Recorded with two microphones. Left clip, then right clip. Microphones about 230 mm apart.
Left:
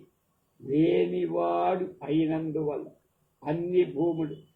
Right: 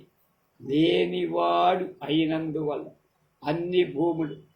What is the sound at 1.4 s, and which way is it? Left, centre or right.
Speech, right.